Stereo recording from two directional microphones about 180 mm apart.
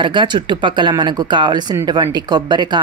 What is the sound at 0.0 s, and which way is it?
Speech, 25° right (ahead or behind).